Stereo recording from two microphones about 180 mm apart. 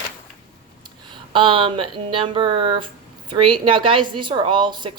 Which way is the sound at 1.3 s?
30° right (ahead or behind).